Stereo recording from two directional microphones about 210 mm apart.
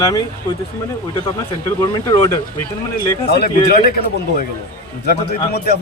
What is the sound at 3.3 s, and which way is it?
Speech, 45° left (ahead or behind).